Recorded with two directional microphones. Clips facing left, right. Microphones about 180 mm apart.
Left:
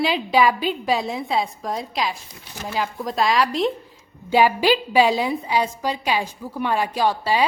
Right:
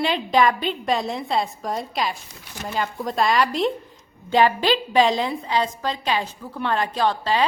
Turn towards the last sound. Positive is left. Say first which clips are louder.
# left 1 dB
turn(degrees=10)  # may be behind; listen again after turning